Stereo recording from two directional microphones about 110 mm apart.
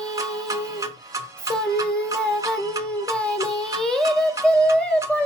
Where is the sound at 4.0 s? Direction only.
30° right (ahead or behind).